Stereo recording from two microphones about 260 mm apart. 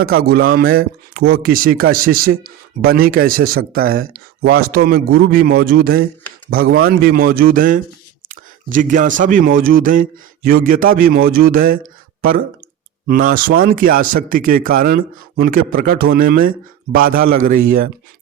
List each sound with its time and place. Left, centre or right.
0.0 s speech: right
13.1 s speech: right